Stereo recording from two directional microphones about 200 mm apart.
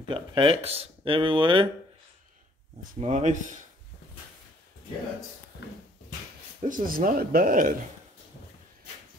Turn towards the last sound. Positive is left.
turn(degrees=-45)  # may be behind; listen again after turning